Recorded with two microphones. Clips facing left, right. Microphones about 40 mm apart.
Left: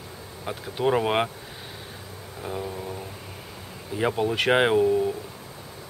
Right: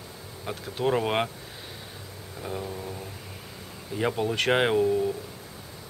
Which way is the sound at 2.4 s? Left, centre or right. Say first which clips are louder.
Left 2 dB; centre.